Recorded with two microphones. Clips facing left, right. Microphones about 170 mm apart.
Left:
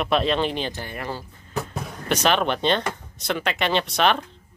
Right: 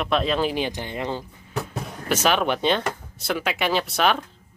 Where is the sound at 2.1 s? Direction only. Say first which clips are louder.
Even; 5° right (ahead or behind).